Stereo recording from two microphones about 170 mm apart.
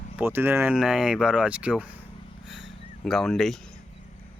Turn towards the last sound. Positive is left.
turn(degrees=0)  # may be behind; listen again after turning